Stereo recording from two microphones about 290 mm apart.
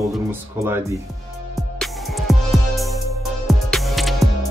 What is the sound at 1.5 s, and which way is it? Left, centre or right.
Music, centre.